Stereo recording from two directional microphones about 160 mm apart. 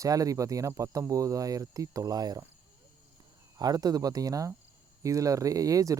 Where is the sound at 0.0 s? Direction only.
20° right (ahead or behind).